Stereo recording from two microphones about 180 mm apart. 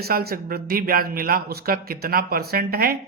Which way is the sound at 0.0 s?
55° right (ahead or behind).